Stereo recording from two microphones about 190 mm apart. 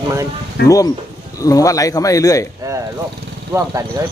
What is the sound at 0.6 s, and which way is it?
Speech, 60° left (ahead or behind).